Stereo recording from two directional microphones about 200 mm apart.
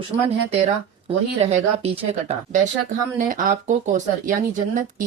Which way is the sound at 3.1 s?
40° right (ahead or behind).